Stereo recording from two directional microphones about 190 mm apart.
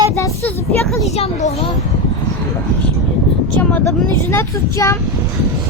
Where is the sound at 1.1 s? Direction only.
35° left (ahead or behind).